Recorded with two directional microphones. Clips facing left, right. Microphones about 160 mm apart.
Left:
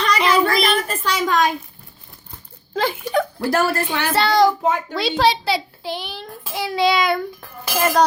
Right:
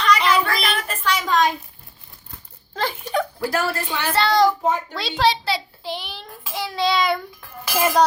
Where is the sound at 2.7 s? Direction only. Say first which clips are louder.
Left 4 dB; 10° left (ahead or behind).